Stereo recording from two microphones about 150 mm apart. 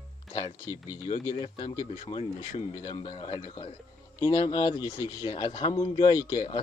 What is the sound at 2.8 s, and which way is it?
Speech, 35° left (ahead or behind).